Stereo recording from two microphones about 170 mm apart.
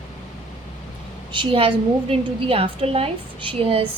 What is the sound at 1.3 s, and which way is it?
A woman's voice, 30° right (ahead or behind).